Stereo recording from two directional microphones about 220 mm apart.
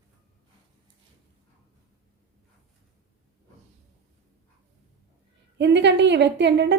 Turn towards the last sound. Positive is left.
turn(degrees=-50)  # may be behind; listen again after turning